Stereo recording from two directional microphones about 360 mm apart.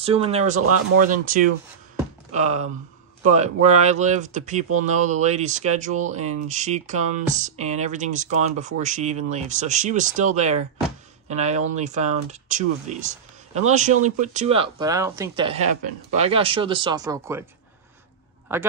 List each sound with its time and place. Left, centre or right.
0.0 s speech: centre
18.5 s a man's voice: centre